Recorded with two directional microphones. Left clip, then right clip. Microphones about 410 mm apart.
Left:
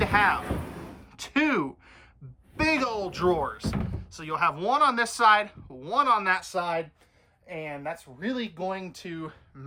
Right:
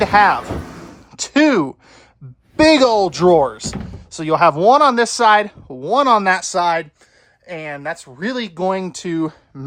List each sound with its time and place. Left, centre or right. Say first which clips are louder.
0.0 s speech: right 10 dB; centre